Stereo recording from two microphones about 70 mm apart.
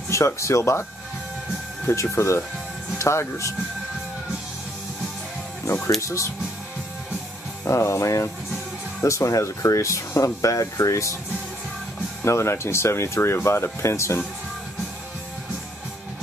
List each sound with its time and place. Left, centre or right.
0.1 s speech: left
1.9 s speech: left
5.9 s speech: left
7.6 s speech: left
12.2 s speech: left